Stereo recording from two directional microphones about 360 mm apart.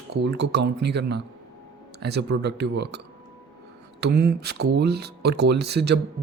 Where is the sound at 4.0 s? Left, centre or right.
Right.